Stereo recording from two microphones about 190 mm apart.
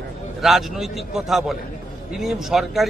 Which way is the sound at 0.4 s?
Centre (ahead or behind).